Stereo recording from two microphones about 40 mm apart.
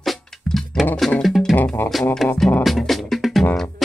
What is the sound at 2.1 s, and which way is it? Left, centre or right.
Music, centre.